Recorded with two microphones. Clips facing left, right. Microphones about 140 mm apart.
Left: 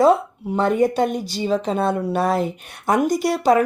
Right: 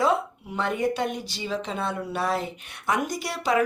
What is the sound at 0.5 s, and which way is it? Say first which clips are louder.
Speech: left 8 dB; 40° left (ahead or behind).